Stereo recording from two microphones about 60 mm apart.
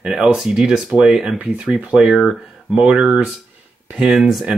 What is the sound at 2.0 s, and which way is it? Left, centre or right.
Speech, centre.